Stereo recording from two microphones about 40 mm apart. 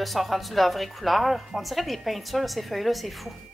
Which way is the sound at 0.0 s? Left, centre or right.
Centre.